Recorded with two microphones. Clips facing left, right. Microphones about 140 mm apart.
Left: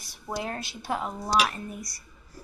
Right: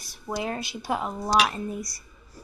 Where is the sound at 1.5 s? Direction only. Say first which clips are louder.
Right 6 dB; 25° right (ahead or behind).